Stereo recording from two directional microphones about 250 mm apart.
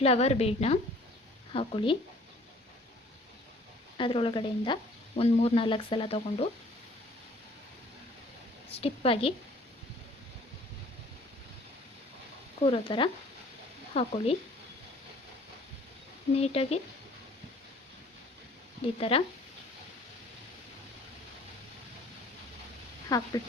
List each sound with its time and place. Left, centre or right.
0.0 s speech: left
3.9 s speech: centre
8.7 s speech: left
12.6 s speech: left
16.3 s speech: left
18.9 s speech: left
23.0 s speech: centre